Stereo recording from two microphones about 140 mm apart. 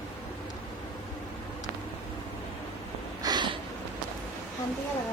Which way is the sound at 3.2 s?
30° right (ahead or behind).